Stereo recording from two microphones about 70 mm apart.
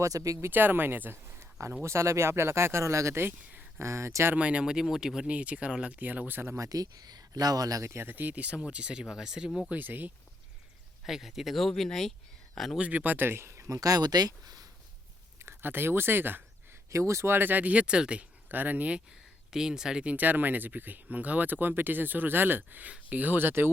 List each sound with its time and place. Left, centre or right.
0.0 s speech: right
0.4 s speech: right
3.2 s speech: right
4.4 s speech: centre
6.6 s speech: right
7.9 s speech: right; by 9.5 s centre
9.7 s speech: right
11.0 s speech: centre
12.7 s speech: centre; by 14.7 s right
15.4 s speech: right
16.9 s speech: right
17.3 s speech: right
19.5 s speech: centre
20.1 s speech: right